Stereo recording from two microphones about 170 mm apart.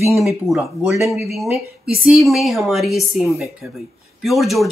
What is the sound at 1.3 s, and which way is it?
Speech, centre (ahead or behind).